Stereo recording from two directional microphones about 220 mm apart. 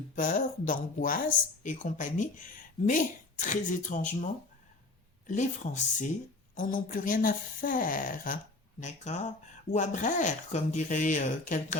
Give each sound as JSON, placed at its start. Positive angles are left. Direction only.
{"t": 0.2, "sound": "speech", "side_deg": 40}